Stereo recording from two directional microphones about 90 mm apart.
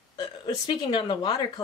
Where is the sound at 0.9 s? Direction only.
85° left.